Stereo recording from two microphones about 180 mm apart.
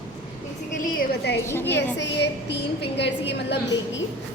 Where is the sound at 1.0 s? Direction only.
60° left (ahead or behind).